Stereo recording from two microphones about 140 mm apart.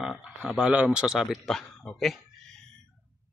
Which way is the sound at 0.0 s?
5° right (ahead or behind).